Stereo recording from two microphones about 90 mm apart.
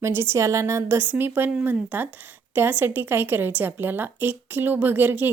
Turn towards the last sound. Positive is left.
turn(degrees=-20)  # may be behind; listen again after turning